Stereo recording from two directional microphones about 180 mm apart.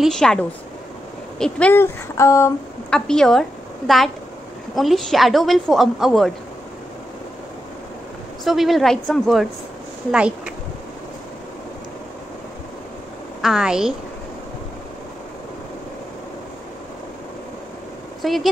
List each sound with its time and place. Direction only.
0.0 s a woman's voice: 5° left (ahead or behind)
2.9 s a woman's voice: 5° left (ahead or behind)
8.5 s a woman's voice: centre (ahead or behind)
13.4 s a woman's voice: 5° right (ahead or behind)
18.2 s speech: centre (ahead or behind)